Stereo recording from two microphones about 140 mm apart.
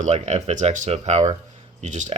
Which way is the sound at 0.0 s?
55° right (ahead or behind).